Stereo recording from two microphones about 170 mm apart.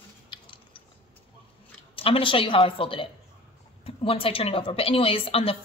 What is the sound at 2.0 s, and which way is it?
A woman's voice, 30° left (ahead or behind).